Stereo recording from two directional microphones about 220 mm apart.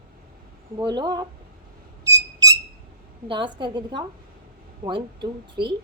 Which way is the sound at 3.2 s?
20° right (ahead or behind).